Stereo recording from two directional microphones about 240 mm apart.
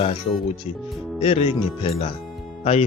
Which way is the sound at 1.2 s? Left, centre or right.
Left.